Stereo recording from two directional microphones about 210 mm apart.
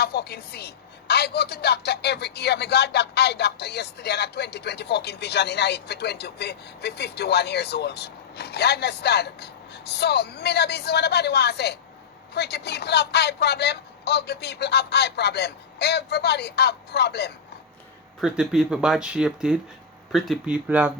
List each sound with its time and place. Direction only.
0.0 s a woman's voice: 50° left (ahead or behind)
18.2 s speech: 5° right (ahead or behind)